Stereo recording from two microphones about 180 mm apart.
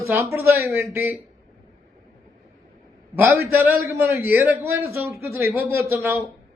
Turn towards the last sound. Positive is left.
turn(degrees=-15)  # may be behind; listen again after turning